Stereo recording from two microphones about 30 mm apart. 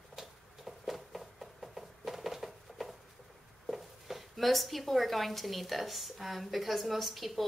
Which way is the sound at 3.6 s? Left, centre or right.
Centre.